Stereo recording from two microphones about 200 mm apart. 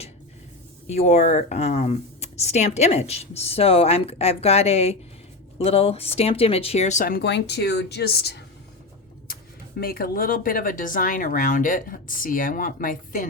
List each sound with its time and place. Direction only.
0.9 s speech: 35° left (ahead or behind)